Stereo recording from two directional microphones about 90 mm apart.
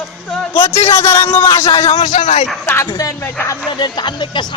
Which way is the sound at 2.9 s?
40° left (ahead or behind).